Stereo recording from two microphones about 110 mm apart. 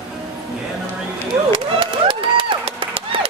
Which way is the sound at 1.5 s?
50° right (ahead or behind).